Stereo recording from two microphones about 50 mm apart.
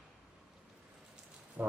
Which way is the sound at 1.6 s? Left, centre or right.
Right.